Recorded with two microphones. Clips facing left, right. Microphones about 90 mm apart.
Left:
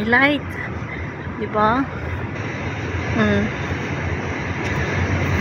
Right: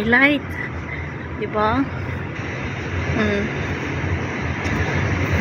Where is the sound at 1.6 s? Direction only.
25° left (ahead or behind).